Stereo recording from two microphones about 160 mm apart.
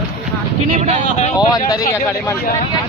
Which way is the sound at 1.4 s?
25° left (ahead or behind).